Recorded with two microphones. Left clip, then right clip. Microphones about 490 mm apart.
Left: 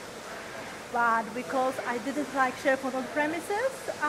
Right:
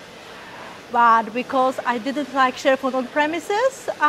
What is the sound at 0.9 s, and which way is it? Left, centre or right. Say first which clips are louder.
Speech: right 11 dB; right.